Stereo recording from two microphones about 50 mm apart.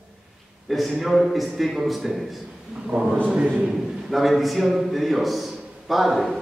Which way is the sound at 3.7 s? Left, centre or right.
Centre.